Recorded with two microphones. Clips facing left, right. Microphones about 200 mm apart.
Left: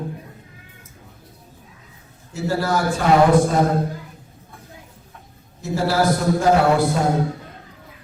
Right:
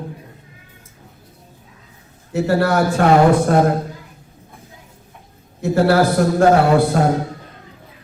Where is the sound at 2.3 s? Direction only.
65° right (ahead or behind).